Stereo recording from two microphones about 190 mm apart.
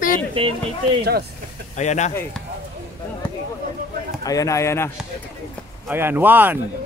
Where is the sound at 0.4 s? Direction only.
30° right (ahead or behind).